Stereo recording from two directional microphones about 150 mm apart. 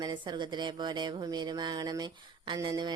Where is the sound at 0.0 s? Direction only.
30° right (ahead or behind).